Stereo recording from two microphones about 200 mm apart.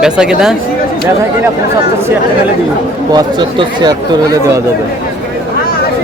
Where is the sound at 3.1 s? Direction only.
20° right (ahead or behind).